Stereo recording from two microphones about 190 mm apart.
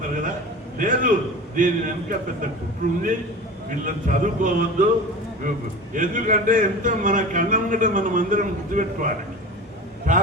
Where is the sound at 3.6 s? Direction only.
45° right (ahead or behind).